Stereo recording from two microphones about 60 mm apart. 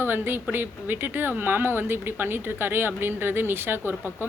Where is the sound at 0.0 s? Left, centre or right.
Right.